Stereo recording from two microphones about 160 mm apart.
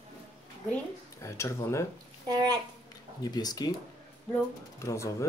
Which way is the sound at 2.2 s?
25° right (ahead or behind).